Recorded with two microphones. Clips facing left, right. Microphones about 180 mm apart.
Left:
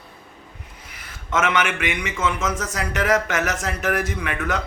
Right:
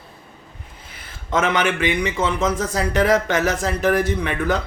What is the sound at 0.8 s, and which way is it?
A man's voice, 30° right (ahead or behind).